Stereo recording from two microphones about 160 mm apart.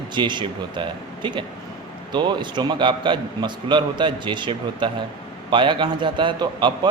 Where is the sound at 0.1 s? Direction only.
30° right (ahead or behind).